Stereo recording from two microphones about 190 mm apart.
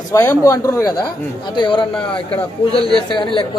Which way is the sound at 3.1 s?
25° left (ahead or behind).